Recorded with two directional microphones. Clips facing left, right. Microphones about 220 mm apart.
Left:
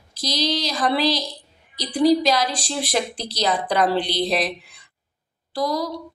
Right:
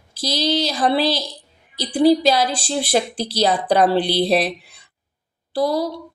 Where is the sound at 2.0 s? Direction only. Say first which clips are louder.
Right 3 dB; 30° right (ahead or behind).